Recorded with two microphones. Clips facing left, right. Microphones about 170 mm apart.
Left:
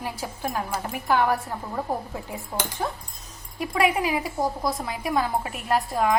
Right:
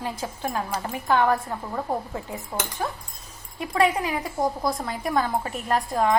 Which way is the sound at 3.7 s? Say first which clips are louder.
Even; 15° left (ahead or behind).